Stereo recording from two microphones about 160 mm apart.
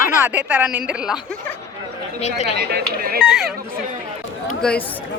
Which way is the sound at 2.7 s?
80° right.